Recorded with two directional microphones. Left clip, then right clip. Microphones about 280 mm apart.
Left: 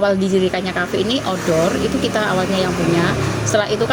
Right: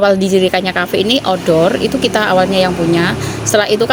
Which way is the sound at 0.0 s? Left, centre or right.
Right.